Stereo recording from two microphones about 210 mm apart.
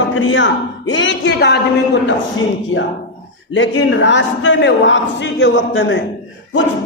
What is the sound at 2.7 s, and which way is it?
A man's voice, 60° left (ahead or behind).